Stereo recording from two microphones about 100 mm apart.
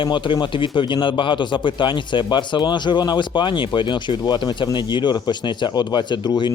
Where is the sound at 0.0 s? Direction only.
50° left (ahead or behind).